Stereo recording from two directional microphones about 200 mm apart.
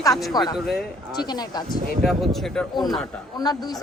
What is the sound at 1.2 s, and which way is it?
Speech, 20° left (ahead or behind).